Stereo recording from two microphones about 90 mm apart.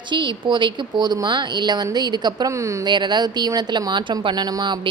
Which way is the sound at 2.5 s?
35° right (ahead or behind).